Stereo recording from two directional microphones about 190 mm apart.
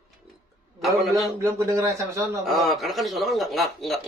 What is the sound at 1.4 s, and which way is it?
Speech, 15° right (ahead or behind).